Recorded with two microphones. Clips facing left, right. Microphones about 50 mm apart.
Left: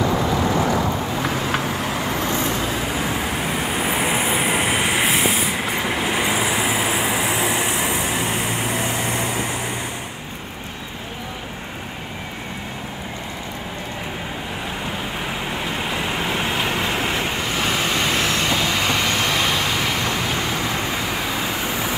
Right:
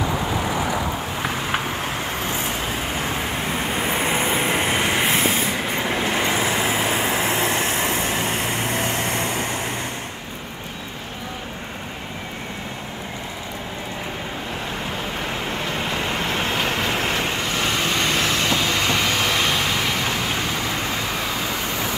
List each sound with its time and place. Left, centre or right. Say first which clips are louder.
0.0 s vehicle: left 3 dB; centre
2.2 s vehicle: left 3 dB; centre
2.8 s vehicle: left 2 dB; centre
15.2 s vehicle: even; centre